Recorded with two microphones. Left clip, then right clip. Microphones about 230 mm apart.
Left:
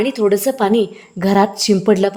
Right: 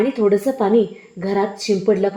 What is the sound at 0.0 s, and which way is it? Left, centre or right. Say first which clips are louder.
A woman's voice: left 1 dB; left.